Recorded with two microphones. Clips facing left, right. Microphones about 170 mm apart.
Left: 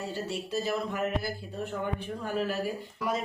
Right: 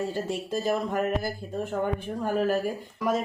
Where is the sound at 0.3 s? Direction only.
50° right (ahead or behind).